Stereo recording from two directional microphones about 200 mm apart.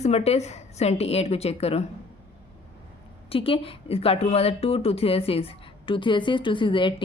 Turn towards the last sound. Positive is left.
turn(degrees=25)  # may be behind; listen again after turning